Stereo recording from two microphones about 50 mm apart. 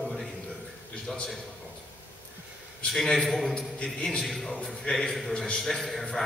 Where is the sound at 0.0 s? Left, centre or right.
Centre.